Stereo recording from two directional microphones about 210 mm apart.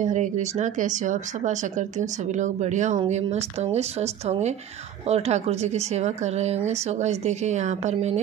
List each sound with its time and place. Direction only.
0.0 s speech: 35° right (ahead or behind)